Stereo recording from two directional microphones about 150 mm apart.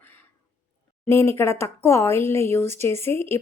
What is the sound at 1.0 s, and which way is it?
A woman's voice, 15° left (ahead or behind).